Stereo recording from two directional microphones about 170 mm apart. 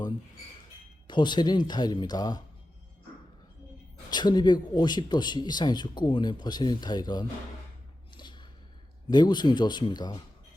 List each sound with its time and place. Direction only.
1.0 s speech: 25° left (ahead or behind)
4.1 s speech: 25° left (ahead or behind)
8.1 s a sound: 25° left (ahead or behind)
9.0 s speech: 25° left (ahead or behind)